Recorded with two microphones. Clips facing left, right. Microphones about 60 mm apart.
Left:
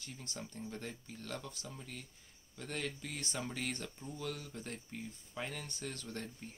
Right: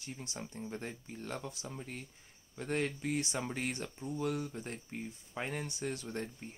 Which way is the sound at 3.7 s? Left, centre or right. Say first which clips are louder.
Right 4 dB; centre.